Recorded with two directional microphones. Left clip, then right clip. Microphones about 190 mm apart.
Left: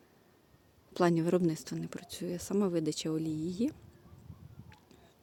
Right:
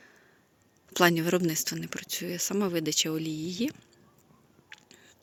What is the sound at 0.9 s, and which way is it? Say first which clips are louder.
Speech: right 5 dB; 5° left (ahead or behind).